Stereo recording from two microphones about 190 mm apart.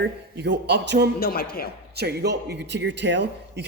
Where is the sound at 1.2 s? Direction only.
50° left (ahead or behind).